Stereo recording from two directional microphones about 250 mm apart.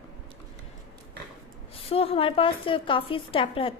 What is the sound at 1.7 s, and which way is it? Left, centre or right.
A woman's voice, left.